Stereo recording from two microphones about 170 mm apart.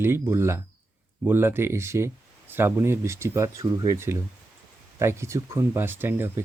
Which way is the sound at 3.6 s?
25° right (ahead or behind).